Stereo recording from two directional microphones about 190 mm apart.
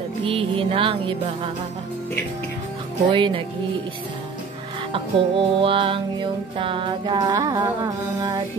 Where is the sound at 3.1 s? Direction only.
25° right (ahead or behind).